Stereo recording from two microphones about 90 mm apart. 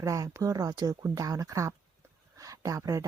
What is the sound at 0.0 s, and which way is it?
Speech, 35° right (ahead or behind).